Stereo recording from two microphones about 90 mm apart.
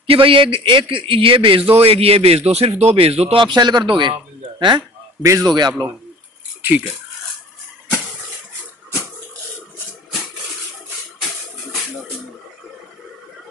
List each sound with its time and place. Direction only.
0.0 s a man's voice: 85° right
3.4 s speech: 55° right (ahead or behind)
5.2 s a man's voice: 35° right (ahead or behind)
5.5 s a man's voice: 50° right (ahead or behind)